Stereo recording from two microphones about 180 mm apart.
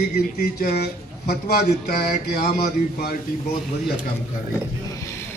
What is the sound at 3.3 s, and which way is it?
Speech, 55° left (ahead or behind).